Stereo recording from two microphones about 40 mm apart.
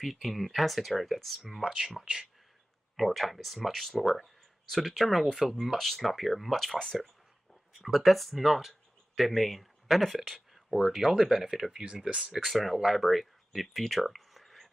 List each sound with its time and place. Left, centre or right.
0.0 s speech: centre
1.6 s speech: centre
3.0 s speech: centre
7.8 s speech: centre
11.8 s speech: right
12.4 s speech: centre
13.5 s a sound: centre